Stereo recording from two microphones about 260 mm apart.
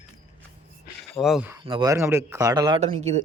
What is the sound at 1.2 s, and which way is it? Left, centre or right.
Speech, centre.